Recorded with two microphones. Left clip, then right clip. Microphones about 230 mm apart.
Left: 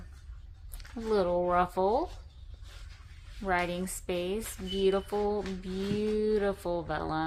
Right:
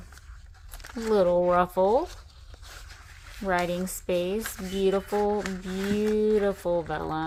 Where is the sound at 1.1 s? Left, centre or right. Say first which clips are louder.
Right 5 dB; right.